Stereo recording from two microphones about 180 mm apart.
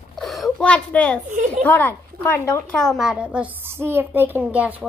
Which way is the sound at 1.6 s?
10° left (ahead or behind).